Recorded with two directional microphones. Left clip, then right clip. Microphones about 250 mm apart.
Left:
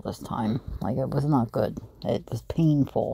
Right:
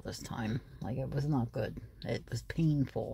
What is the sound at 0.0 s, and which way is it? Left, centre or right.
Speech, centre.